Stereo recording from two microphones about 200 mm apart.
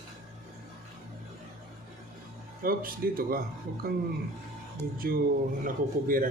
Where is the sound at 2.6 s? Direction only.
45° right (ahead or behind).